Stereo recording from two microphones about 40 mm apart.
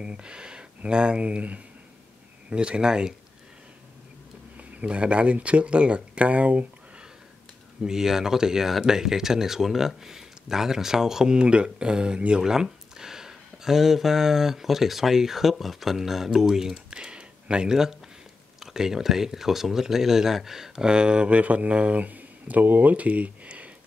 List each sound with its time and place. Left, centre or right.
0.0 s speech: right
2.5 s speech: right
4.6 s speech: right
7.8 s speech: centre; by 23.7 s right